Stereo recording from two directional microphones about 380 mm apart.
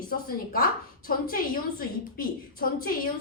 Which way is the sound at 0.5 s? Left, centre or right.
Left.